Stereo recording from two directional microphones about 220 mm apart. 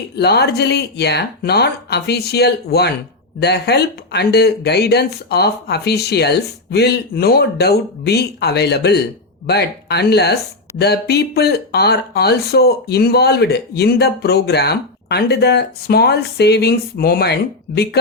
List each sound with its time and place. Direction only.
0.2 s speech: 50° left (ahead or behind)